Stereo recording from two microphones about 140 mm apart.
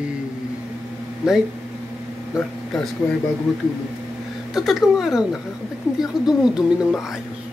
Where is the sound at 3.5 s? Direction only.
Centre (ahead or behind).